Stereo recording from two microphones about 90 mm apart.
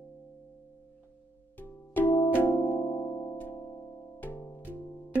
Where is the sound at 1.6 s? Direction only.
20° left (ahead or behind).